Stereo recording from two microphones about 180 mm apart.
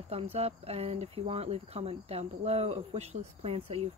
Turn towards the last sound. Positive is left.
turn(degrees=-35)  # may be behind; listen again after turning